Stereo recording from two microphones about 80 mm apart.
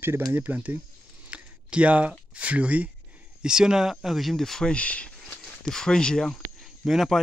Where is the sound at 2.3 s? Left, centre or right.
Centre.